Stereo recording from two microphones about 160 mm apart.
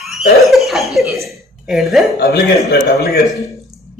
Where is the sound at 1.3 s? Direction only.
Centre (ahead or behind).